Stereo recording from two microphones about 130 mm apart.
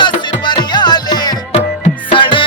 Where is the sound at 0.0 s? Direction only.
35° left (ahead or behind).